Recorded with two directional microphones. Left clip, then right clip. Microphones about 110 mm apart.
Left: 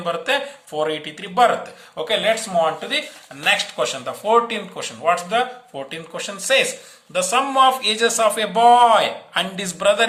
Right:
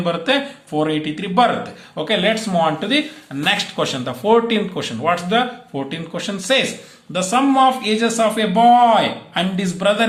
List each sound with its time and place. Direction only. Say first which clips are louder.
0.0 s speech: right 3 dB; 30° left (ahead or behind); by 10.1 s 60° left (ahead or behind)